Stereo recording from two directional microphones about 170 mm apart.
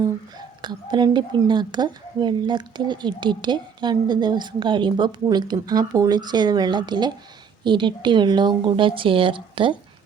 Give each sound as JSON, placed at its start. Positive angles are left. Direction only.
{"t": 0.0, "sound": "a woman's voice", "side_deg": -25}